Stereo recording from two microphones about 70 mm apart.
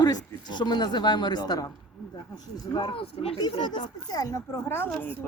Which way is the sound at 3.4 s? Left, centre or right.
Left.